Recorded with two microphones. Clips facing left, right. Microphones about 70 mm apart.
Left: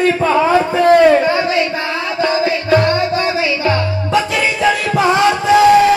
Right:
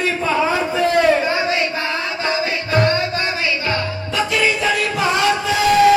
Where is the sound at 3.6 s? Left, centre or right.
Left.